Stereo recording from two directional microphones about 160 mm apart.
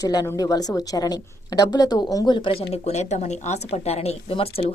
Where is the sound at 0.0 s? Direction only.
25° left (ahead or behind).